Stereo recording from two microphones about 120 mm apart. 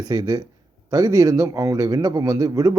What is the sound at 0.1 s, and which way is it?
A man's voice, 35° right (ahead or behind).